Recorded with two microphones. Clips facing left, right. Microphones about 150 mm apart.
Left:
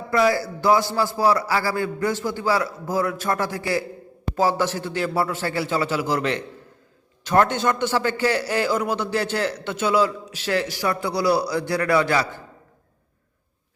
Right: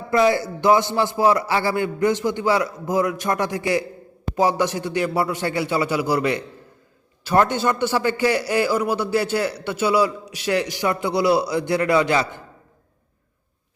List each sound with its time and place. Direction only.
0.1 s a man's voice: 20° right (ahead or behind)